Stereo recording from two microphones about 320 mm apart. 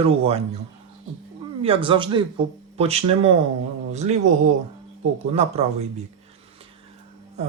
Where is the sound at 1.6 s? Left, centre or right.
Centre.